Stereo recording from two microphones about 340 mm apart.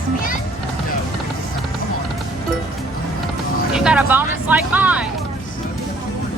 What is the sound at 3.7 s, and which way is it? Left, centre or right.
Music, centre.